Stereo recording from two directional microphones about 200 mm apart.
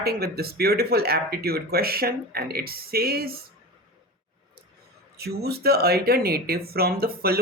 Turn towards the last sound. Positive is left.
turn(degrees=-50)  # may be behind; listen again after turning